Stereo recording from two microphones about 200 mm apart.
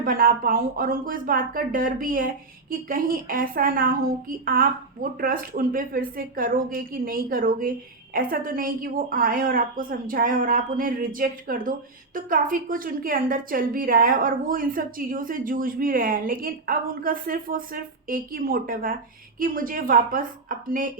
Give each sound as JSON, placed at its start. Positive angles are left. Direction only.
{"t": 0.0, "sound": "a woman's voice", "side_deg": -45}